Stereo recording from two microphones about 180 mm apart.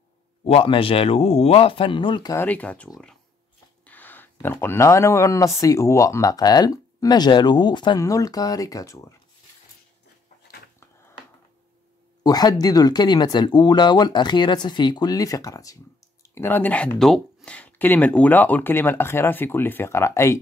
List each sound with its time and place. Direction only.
0.5 s speech: 30° left (ahead or behind)
2.3 s speech: 10° left (ahead or behind)
12.2 s speech: 20° left (ahead or behind)